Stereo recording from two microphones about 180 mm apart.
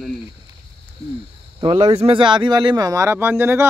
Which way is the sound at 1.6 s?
30° right (ahead or behind).